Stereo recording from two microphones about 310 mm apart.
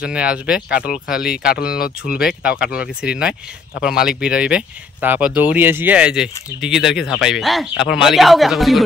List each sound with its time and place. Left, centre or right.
0.0 s speech: centre
0.8 s speech: left
1.1 s speech: centre